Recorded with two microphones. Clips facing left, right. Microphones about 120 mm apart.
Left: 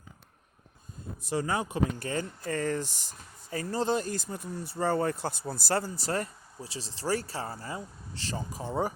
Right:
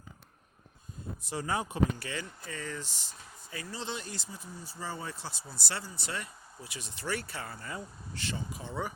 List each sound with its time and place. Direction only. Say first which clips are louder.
1.2 s speech: left 4 dB; 50° left (ahead or behind)